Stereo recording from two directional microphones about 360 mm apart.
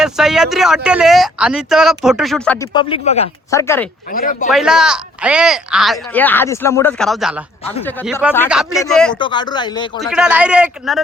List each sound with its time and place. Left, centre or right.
0.0 s speech: centre
4.1 s speech: left
4.5 s speech: centre
9.1 s speech: centre
10.0 s speech: centre